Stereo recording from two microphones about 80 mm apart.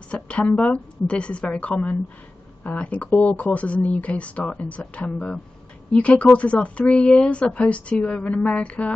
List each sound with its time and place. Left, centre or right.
0.1 s speech: centre